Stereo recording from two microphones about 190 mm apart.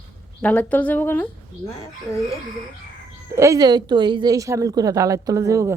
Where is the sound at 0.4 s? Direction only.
10° left (ahead or behind).